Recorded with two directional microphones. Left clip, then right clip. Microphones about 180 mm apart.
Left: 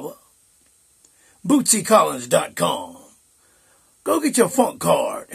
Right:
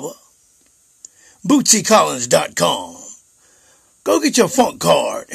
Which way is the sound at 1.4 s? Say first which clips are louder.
Right 5 dB; 40° right (ahead or behind).